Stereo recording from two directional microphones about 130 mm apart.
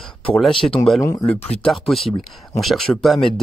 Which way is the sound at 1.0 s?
25° left (ahead or behind).